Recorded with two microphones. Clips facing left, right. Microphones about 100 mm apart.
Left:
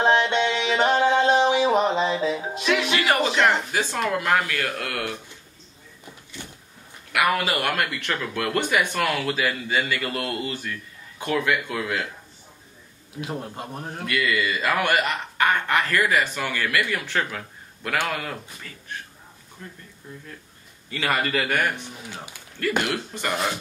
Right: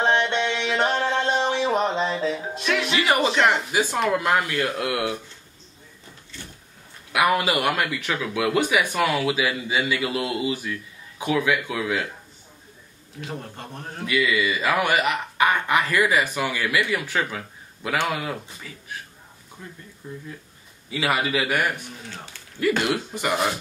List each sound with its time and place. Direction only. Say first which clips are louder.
0.0 s music: left 2 dB; 5° left (ahead or behind)
4.2 s speech: right 1 dB; 20° right (ahead or behind)
6.4 s a sound: left 2 dB; 15° left (ahead or behind)
7.1 s speech: right 2 dB; 20° right (ahead or behind)
7.7 s speech: right 1 dB; 5° right (ahead or behind)
13.2 s a man's voice: left 3 dB; 10° left (ahead or behind)
14.0 s speech: right 2 dB; 5° right (ahead or behind)
20.9 s speech: right 1 dB; 10° right (ahead or behind)
22.1 s a man's voice: left 1 dB; 15° left (ahead or behind)
22.8 s speech: right 3 dB; 15° right (ahead or behind)